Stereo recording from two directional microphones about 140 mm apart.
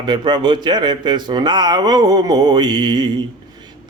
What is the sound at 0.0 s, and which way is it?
A man's voice, 30° right (ahead or behind).